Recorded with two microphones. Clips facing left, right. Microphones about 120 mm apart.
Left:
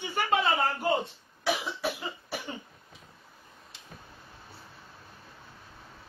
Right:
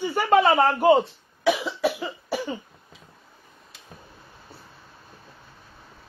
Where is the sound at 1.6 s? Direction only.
90° right.